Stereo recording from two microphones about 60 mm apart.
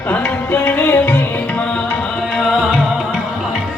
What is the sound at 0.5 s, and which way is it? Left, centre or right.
Music, left.